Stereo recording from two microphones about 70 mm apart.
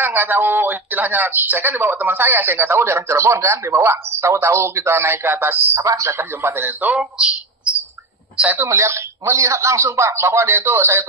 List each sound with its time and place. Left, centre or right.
0.0 s speech: right
5.8 s speech: right
6.1 s speech: right
7.0 s speech: centre
8.5 s speech: right